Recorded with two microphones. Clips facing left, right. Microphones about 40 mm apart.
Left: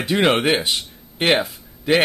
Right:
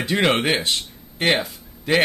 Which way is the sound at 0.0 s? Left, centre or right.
Centre.